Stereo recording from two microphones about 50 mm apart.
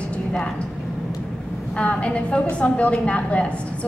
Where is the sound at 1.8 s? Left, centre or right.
Left.